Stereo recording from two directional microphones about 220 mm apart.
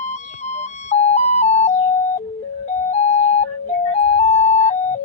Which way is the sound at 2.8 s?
30° left (ahead or behind).